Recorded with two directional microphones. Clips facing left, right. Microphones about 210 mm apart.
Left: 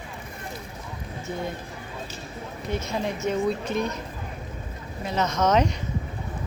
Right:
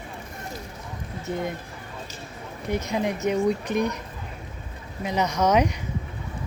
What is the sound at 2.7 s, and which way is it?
Speech, 15° right (ahead or behind).